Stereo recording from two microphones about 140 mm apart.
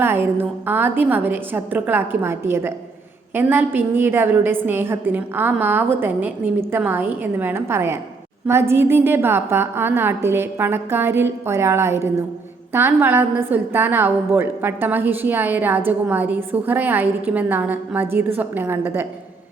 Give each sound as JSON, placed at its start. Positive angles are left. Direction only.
{"t": 0.0, "sound": "a woman's voice", "side_deg": -15}